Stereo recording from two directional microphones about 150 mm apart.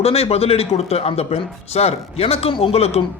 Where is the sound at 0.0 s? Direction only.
45° left (ahead or behind).